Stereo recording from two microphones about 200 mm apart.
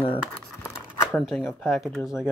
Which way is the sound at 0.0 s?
10° left (ahead or behind).